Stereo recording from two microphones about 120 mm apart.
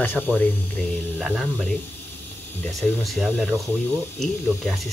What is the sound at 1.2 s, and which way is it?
Speech, 5° right (ahead or behind).